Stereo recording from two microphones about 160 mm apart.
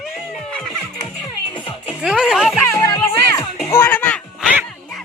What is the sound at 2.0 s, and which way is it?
Music, 5° right (ahead or behind).